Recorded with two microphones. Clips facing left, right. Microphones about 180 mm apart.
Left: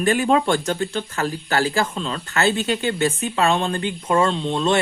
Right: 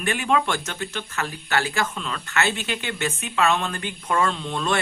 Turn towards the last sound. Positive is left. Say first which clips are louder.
# left 6 dB
turn(degrees=25)  # may be behind; listen again after turning